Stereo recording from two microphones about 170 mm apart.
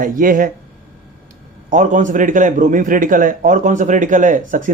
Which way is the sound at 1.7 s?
45° right (ahead or behind).